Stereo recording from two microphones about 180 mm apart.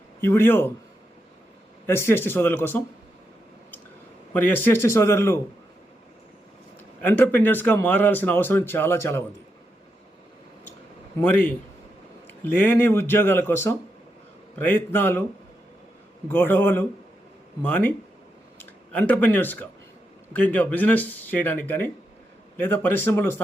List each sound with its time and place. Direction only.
0.2 s a man's voice: 15° left (ahead or behind)
1.9 s a man's voice: 15° left (ahead or behind)
4.4 s a man's voice: 10° left (ahead or behind)
7.0 s a man's voice: 10° left (ahead or behind)
11.2 s a man's voice: 10° left (ahead or behind)
16.3 s a man's voice: 10° left (ahead or behind)